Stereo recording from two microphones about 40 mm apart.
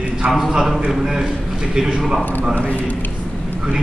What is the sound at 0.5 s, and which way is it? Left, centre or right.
Speech, centre.